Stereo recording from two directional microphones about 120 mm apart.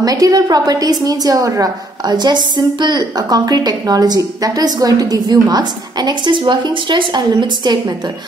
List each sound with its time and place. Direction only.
0.0 s a woman's voice: 30° right (ahead or behind)